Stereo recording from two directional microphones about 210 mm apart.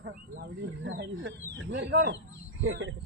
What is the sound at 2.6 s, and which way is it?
Speech, 70° right (ahead or behind).